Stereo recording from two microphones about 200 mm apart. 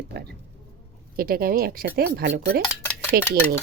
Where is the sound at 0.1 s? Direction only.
55° right (ahead or behind).